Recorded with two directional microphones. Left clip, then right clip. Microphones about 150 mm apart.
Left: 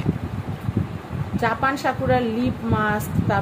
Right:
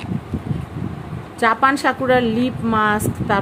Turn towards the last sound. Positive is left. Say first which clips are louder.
# right 4 dB
turn(degrees=-75)  # may be behind; listen again after turning